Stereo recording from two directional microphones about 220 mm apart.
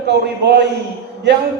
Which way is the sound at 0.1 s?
50° right (ahead or behind).